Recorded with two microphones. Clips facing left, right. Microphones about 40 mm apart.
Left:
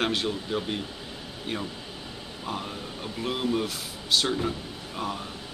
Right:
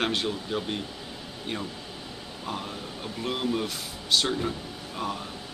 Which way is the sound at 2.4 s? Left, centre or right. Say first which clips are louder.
Left 1 dB; centre.